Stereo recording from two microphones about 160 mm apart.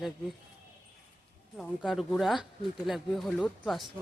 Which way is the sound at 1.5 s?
Centre (ahead or behind).